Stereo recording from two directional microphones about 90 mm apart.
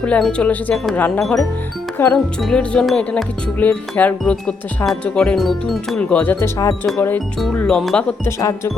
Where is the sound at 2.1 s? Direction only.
5° left (ahead or behind).